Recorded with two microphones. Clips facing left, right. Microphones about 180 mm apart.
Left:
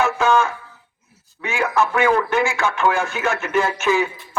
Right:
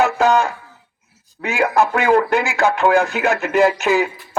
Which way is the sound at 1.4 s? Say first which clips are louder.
Right 3 dB; 40° right (ahead or behind).